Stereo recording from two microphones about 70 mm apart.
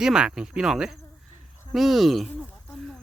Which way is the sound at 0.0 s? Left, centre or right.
Centre.